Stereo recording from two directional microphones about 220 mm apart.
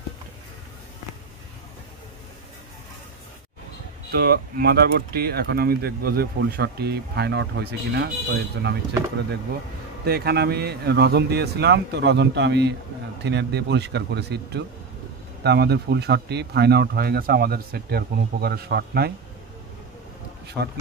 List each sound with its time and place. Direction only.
4.1 s speech: 45° right (ahead or behind)
10.0 s speech: 45° right (ahead or behind)
20.4 s speech: 50° right (ahead or behind)